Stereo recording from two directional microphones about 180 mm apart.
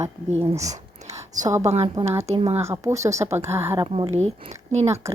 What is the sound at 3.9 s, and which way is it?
Speech, 35° right (ahead or behind).